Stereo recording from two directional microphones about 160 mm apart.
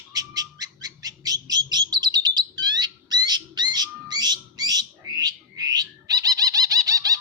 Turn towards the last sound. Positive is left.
turn(degrees=-20)  # may be behind; listen again after turning